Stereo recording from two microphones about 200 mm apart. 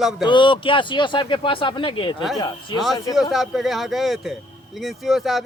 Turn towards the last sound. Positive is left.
turn(degrees=0)  # may be behind; listen again after turning